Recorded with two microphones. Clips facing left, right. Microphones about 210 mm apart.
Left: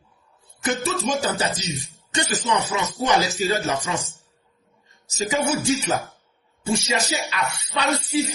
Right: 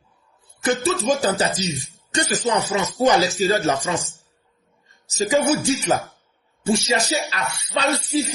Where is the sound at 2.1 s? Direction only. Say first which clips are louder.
Right 2 dB; 35° right (ahead or behind).